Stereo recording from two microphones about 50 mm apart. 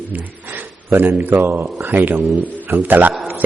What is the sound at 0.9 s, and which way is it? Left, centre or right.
A man's voice, right.